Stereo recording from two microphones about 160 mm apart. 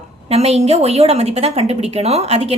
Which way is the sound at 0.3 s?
40° right (ahead or behind).